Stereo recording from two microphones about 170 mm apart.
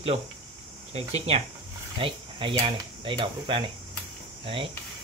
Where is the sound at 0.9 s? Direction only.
40° right (ahead or behind).